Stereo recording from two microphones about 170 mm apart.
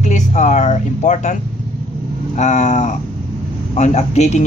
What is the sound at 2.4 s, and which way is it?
Speech, 45° left (ahead or behind).